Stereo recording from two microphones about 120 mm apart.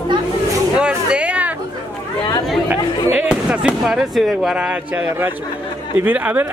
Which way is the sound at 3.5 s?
5° right (ahead or behind).